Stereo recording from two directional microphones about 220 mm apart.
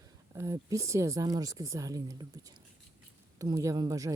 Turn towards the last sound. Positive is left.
turn(degrees=-15)  # may be behind; listen again after turning